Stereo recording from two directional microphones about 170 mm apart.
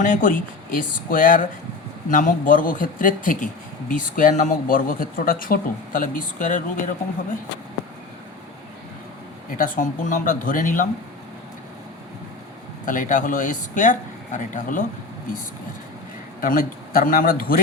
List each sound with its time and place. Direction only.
0.0 s speech: 50° left (ahead or behind)
9.6 s speech: 55° left (ahead or behind)
12.8 s speech: 50° left (ahead or behind)
16.4 s a man's voice: 55° left (ahead or behind)